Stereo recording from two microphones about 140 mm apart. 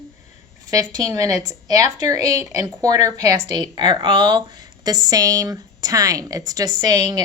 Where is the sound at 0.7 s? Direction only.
25° right (ahead or behind).